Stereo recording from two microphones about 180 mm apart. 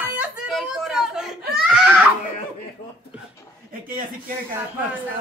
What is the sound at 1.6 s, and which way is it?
Baby cry, 5° right (ahead or behind).